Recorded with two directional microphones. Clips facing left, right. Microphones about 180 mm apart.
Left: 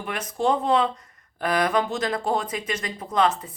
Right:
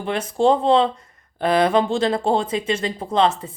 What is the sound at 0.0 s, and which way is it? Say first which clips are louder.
A woman's voice: right 6 dB; 30° right (ahead or behind).